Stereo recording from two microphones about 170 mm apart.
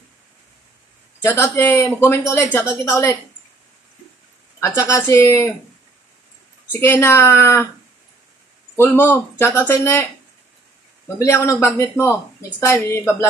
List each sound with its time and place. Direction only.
1.2 s speech: 15° left (ahead or behind)
4.6 s speech: 15° left (ahead or behind)
6.7 s speech: 15° left (ahead or behind)
8.7 s speech: 15° left (ahead or behind)
11.1 s speech: 15° left (ahead or behind)